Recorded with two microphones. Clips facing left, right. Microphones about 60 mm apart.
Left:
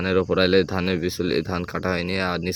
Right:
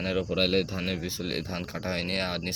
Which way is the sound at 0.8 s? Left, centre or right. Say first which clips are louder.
Left 9 dB; left.